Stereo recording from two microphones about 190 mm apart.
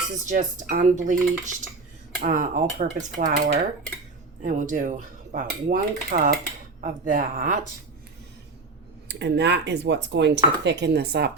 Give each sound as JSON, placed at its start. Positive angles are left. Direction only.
{"t": 0.3, "sound": "dishes", "side_deg": -45}
{"t": 2.2, "sound": "mechanisms", "side_deg": -45}
{"t": 9.0, "sound": "speech", "side_deg": -65}